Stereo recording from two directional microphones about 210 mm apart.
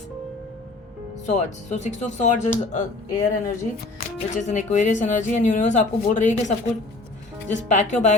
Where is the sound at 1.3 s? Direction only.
35° left (ahead or behind).